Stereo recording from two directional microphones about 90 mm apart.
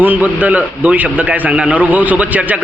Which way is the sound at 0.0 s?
20° right (ahead or behind).